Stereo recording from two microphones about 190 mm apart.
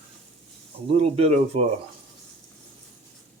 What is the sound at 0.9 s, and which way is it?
Speech, 35° right (ahead or behind).